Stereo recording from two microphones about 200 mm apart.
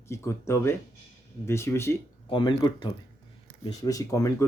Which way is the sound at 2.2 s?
25° left (ahead or behind).